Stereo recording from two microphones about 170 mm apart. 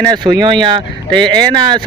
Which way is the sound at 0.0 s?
25° right (ahead or behind).